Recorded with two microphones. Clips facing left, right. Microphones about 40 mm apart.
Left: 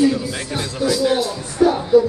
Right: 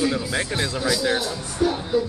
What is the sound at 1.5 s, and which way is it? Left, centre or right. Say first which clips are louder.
Music: left 7 dB; left.